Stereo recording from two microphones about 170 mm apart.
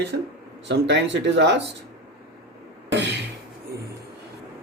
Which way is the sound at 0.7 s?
90° right.